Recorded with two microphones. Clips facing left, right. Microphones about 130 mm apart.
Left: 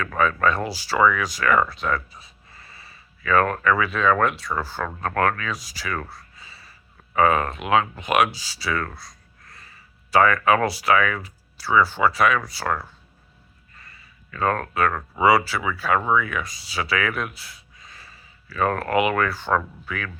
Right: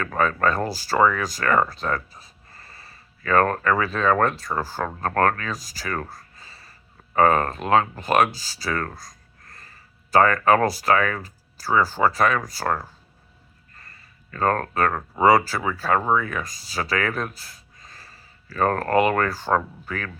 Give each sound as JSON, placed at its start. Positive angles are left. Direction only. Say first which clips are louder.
{"t": 0.1, "sound": "speech", "louder": "left 1 dB", "side_deg": -35}
{"t": 14.3, "sound": "speech", "louder": "right 1 dB", "side_deg": -40}